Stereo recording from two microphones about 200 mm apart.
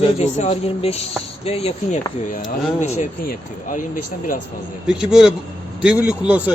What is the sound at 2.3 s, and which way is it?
Speech, 45° left (ahead or behind).